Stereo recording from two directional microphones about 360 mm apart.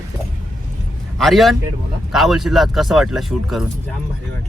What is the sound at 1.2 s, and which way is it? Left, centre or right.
Speech, centre.